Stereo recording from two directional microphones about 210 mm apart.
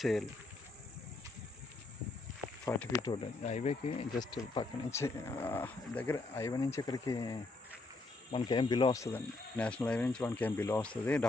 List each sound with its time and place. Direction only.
0.0 s speech: centre (ahead or behind)
2.6 s speech: 15° left (ahead or behind); by 3.9 s 30° left (ahead or behind)
4.2 s speech: 15° left (ahead or behind)